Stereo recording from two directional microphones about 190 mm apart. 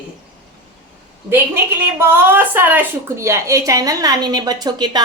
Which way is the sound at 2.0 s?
10° right (ahead or behind).